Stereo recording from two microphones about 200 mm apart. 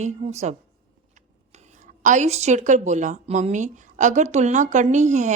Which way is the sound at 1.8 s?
40° right (ahead or behind).